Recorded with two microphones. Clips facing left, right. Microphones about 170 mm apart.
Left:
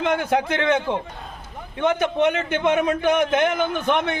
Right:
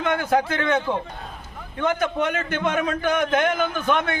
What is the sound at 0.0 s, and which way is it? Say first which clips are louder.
A man's voice: even; 25° left (ahead or behind).